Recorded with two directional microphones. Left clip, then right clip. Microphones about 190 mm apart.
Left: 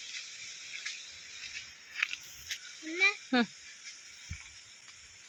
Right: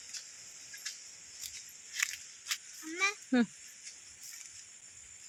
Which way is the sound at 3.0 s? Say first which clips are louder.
Left 4 dB; 25° right (ahead or behind).